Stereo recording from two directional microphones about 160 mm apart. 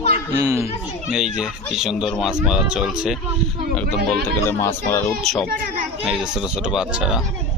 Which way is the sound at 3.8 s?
75° right (ahead or behind).